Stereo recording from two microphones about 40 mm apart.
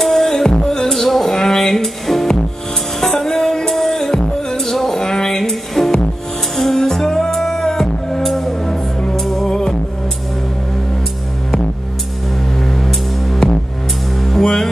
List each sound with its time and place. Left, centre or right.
0.0 s music: centre
9.5 s music: centre
12.8 s music: centre